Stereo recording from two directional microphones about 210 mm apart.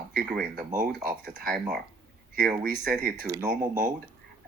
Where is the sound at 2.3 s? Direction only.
40° right (ahead or behind).